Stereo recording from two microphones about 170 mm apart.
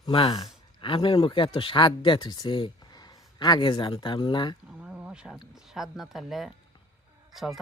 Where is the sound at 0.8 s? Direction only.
30° left (ahead or behind).